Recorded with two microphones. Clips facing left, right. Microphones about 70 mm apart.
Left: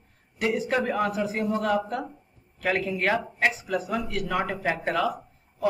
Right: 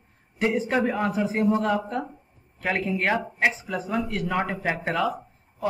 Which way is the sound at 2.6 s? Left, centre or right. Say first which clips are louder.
Even; centre.